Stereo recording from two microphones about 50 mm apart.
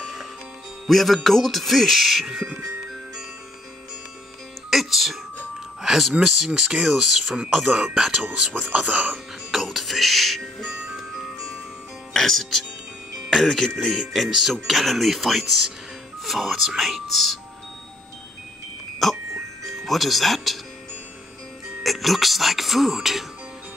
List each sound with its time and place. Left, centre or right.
0.8 s music: centre
4.6 s music: centre
6.2 s speech: centre
8.7 s speech: right
9.1 s music: centre
12.1 s speech: centre
13.3 s music: centre
19.0 s music: centre
19.7 s speech: centre
21.8 s music: centre